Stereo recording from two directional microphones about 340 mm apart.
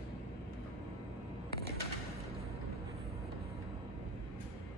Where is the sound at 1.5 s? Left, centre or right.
Left.